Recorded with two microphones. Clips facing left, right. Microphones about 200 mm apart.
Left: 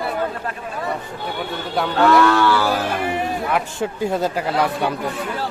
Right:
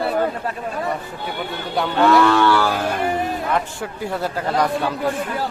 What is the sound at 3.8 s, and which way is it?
Speech, 20° left (ahead or behind).